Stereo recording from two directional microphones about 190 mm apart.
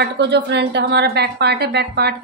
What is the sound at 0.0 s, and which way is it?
A woman's voice, 65° right (ahead or behind).